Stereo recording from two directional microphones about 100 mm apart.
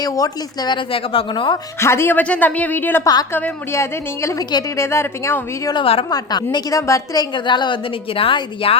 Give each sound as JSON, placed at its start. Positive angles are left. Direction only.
{"t": 0.0, "sound": "a woman's voice", "side_deg": 40}
{"t": 0.9, "sound": "a woman's voice", "side_deg": 60}
{"t": 1.8, "sound": "a woman's voice", "side_deg": 25}
{"t": 3.0, "sound": "a woman's voice", "side_deg": 40}
{"t": 3.3, "sound": "a woman's voice", "side_deg": 25}
{"t": 5.7, "sound": "a woman's voice", "side_deg": 65}
{"t": 6.1, "sound": "a woman's voice", "side_deg": 45}
{"t": 7.3, "sound": "a woman's voice", "side_deg": 50}